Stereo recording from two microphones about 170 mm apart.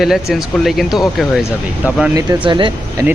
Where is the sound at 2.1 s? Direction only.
20° right (ahead or behind).